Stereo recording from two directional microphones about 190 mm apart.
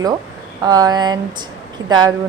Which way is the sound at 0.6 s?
20° right (ahead or behind).